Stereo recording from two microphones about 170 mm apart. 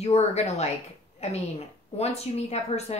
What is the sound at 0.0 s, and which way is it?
A woman's voice, 40° left (ahead or behind).